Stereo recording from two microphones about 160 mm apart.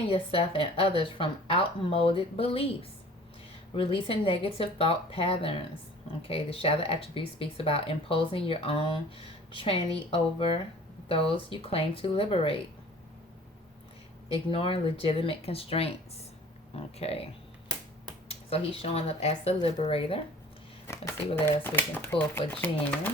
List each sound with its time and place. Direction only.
0.1 s speech: 35° left (ahead or behind)
3.8 s speech: 35° left (ahead or behind)
14.5 s speech: 35° left (ahead or behind)
17.0 s speech: 40° left (ahead or behind)
18.3 s speech: 40° left (ahead or behind)
20.8 s speech: 15° left (ahead or behind)